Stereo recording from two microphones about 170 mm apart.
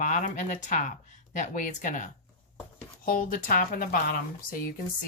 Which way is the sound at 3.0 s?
55° left (ahead or behind).